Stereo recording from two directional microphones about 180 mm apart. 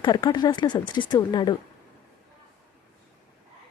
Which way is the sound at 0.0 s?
25° left (ahead or behind).